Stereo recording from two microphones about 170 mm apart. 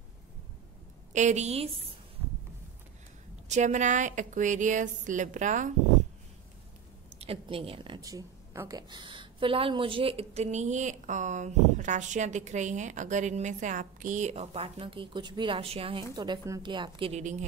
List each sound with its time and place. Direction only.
1.1 s a woman's voice: 45° right (ahead or behind)
3.4 s a woman's voice: 45° right (ahead or behind)
7.2 s a woman's voice: 35° right (ahead or behind)
17.2 s a woman's voice: 45° right (ahead or behind)